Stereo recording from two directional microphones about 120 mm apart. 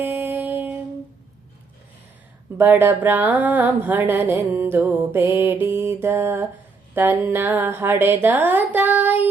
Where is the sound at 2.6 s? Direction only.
15° right (ahead or behind).